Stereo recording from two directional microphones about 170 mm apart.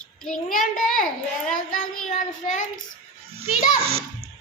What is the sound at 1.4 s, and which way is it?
Child singing, 50° left (ahead or behind).